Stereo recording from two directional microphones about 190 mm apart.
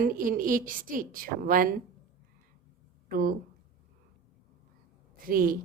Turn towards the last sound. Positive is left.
turn(degrees=-50)  # may be behind; listen again after turning